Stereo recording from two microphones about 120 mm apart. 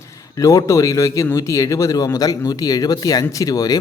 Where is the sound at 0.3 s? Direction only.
30° left (ahead or behind).